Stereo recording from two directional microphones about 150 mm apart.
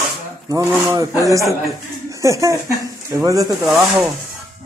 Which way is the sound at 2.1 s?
20° right (ahead or behind).